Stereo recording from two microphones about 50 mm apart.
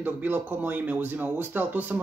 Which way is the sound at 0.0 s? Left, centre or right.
Right.